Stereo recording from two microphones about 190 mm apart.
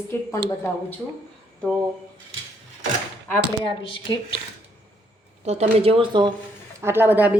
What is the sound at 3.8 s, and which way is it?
Speech, 30° left (ahead or behind).